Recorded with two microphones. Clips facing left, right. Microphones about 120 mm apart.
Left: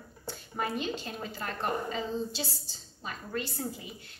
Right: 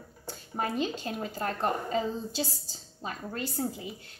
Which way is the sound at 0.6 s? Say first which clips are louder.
Right 2 dB; 40° right (ahead or behind).